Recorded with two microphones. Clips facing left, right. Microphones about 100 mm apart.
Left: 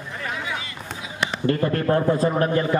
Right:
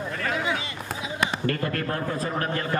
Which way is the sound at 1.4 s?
25° left (ahead or behind).